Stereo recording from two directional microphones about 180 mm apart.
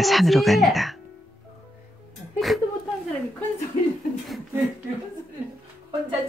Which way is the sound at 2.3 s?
Centre (ahead or behind).